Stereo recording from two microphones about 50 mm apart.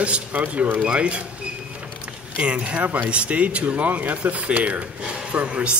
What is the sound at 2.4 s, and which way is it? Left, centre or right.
Speech, right.